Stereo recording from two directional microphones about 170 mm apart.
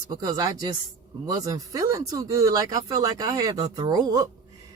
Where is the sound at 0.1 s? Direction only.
20° right (ahead or behind).